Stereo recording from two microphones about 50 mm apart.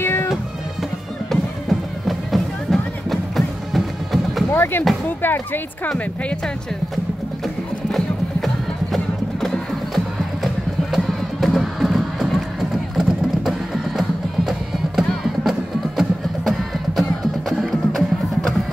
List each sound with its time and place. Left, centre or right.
0.0 s music: left
1.3 s music: centre
4.5 s a sound: left
5.0 s speech: left
7.4 s music: centre
13.5 s music: centre